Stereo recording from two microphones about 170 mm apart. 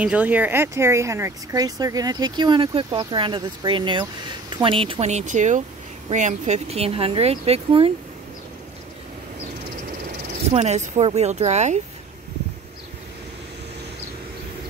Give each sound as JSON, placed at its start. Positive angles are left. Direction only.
{"t": 0.0, "sound": "speech", "side_deg": -10}
{"t": 10.5, "sound": "speech", "side_deg": -40}